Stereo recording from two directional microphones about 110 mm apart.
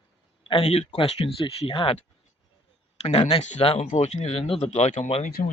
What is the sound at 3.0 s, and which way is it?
Speech, 75° left (ahead or behind).